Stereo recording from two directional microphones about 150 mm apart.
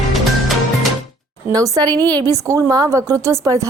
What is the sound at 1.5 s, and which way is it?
A woman's voice, 25° right (ahead or behind).